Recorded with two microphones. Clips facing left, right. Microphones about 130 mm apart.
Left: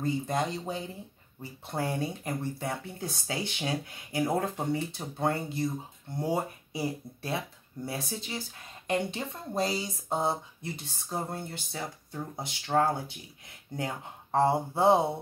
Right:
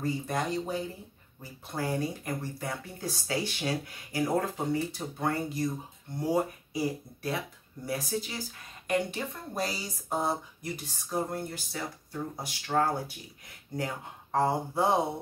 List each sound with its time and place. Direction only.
0.0 s speech: 25° left (ahead or behind)